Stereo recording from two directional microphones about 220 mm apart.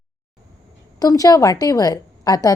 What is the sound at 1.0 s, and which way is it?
A woman's voice, 15° left (ahead or behind).